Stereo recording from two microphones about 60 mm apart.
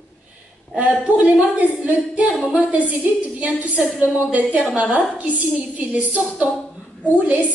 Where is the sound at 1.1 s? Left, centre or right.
Right.